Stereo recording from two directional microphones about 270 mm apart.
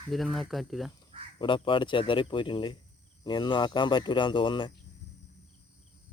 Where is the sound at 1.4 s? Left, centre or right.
Centre.